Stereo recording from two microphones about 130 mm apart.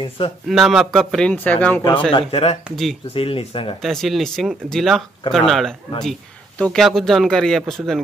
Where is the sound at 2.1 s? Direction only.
45° left (ahead or behind).